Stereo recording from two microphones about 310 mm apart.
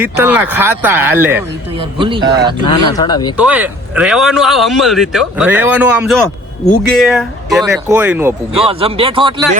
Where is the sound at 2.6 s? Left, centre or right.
Centre.